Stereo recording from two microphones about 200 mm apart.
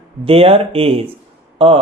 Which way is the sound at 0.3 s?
30° right (ahead or behind).